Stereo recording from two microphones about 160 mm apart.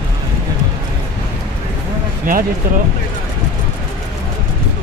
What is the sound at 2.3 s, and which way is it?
Speech, 60° right (ahead or behind).